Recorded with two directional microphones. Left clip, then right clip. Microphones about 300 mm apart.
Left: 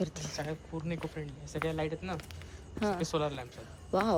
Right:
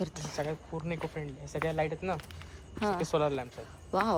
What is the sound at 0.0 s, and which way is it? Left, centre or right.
Speech, centre.